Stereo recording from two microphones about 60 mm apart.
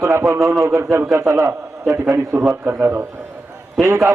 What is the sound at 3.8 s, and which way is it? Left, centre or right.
Speech, right.